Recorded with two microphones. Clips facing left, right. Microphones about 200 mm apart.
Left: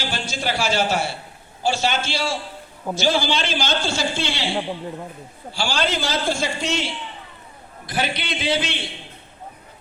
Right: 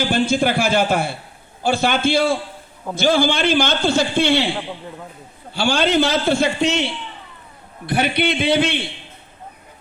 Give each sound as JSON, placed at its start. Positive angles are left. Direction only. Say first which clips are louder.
{"t": 0.1, "sound": "a man's voice", "louder": "right 9 dB", "side_deg": -55}
{"t": 5.5, "sound": "a man's voice", "louder": "right 7 dB", "side_deg": -60}